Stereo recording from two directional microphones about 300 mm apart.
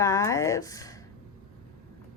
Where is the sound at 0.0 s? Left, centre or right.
Centre.